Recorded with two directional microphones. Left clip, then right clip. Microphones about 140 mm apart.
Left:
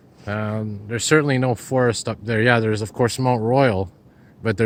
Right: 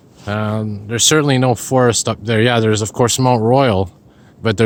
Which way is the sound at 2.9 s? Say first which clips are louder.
Right 5 dB; 25° right (ahead or behind).